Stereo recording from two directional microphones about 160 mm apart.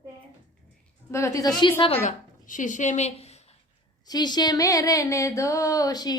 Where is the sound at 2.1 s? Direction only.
50° left (ahead or behind).